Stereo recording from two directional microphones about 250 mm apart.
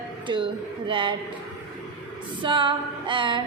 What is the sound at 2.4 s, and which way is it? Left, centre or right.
A woman's voice, centre.